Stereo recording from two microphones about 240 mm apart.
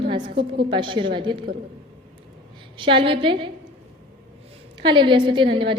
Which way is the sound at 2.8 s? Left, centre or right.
Right.